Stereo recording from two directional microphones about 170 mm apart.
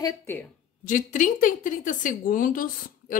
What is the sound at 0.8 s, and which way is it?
Speech, 50° left (ahead or behind).